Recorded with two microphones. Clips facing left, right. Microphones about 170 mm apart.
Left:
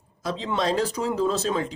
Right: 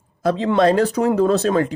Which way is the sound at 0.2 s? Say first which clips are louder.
Right 10 dB; 60° right (ahead or behind).